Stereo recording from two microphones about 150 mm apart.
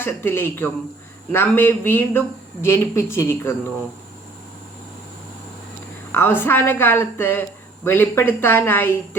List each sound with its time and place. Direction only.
0.0 s speech: 15° left (ahead or behind)
6.1 s speech: 15° left (ahead or behind)